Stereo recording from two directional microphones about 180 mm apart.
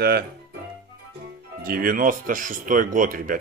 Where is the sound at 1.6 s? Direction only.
50° right (ahead or behind).